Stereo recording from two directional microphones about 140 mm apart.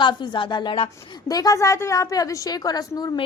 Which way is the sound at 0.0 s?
35° left (ahead or behind).